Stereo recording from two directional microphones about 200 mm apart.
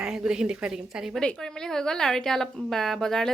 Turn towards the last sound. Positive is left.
turn(degrees=0)  # may be behind; listen again after turning